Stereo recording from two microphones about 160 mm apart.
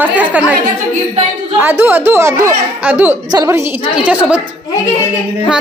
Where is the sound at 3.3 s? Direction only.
20° right (ahead or behind).